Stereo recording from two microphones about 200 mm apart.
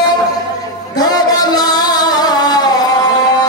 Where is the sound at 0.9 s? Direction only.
20° left (ahead or behind).